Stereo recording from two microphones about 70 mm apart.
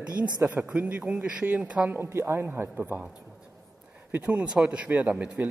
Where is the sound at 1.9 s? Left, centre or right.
Right.